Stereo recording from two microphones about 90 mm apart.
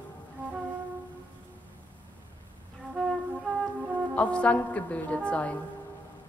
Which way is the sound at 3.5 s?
15° left (ahead or behind).